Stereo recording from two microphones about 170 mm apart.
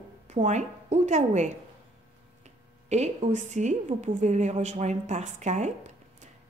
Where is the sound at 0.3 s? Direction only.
45° right (ahead or behind).